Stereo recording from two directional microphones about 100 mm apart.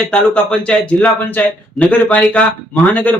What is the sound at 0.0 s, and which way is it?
Speech, 10° left (ahead or behind).